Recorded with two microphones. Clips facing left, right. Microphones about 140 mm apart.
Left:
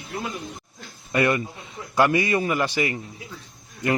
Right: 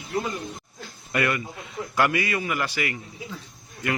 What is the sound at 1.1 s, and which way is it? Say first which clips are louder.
A man's voice: left 4 dB; 25° left (ahead or behind).